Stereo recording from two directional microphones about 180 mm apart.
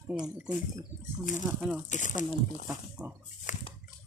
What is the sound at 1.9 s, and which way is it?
Speech, 45° left (ahead or behind).